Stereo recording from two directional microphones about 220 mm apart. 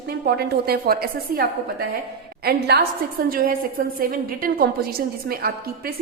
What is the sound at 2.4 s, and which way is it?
A woman's voice, 45° right (ahead or behind).